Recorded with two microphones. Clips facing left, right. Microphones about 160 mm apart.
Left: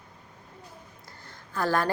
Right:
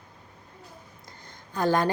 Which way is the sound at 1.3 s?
20° right (ahead or behind).